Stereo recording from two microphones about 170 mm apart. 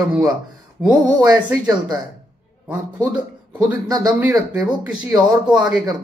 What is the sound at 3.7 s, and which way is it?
Speech, 20° right (ahead or behind).